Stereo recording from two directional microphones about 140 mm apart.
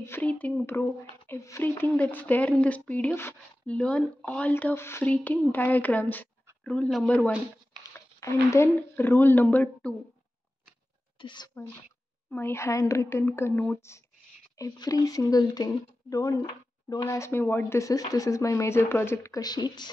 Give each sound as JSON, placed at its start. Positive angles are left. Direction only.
{"t": 0.0, "sound": "speech", "side_deg": 15}
{"t": 8.2, "sound": "speech", "side_deg": 20}
{"t": 11.1, "sound": "speech", "side_deg": 35}
{"t": 12.3, "sound": "speech", "side_deg": 15}